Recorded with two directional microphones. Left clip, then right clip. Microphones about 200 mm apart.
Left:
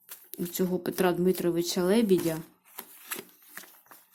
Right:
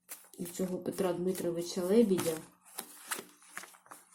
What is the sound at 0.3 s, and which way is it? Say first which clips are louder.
Speech: left 7 dB; 35° left (ahead or behind).